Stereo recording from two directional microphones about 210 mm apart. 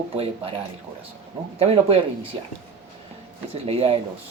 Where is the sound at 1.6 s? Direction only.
30° right (ahead or behind).